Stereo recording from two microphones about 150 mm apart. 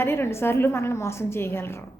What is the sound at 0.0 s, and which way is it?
A woman's voice, 15° left (ahead or behind).